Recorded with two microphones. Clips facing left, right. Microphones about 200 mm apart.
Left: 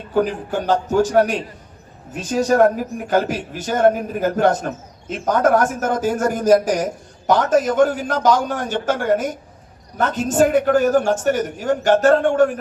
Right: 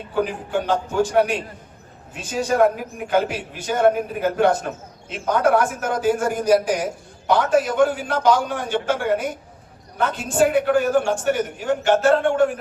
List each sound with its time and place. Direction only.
0.6 s a man's voice: 40° left (ahead or behind)